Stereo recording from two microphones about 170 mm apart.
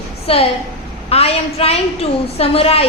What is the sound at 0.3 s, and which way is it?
A woman's voice, 35° left (ahead or behind).